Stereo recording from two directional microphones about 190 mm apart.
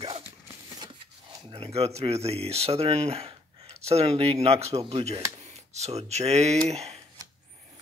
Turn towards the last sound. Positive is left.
turn(degrees=-35)  # may be behind; listen again after turning